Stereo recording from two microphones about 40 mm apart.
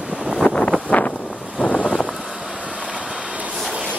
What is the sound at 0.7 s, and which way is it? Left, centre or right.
Wind, left.